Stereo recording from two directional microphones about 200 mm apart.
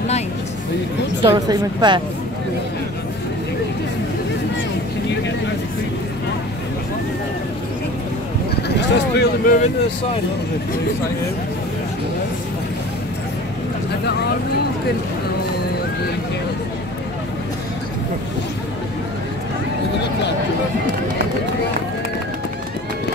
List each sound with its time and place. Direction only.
1.2 s a woman's voice: 25° right (ahead or behind)
8.6 s speech: 55° left (ahead or behind)